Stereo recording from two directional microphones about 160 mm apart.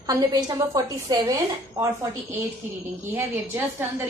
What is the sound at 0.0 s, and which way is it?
A woman's voice, 25° right (ahead or behind).